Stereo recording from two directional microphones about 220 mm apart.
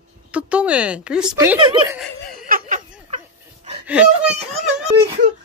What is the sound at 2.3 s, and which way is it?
Laughter, 40° right (ahead or behind).